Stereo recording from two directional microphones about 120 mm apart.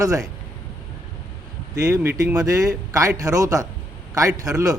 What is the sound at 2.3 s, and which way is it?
A man's voice, 30° right (ahead or behind).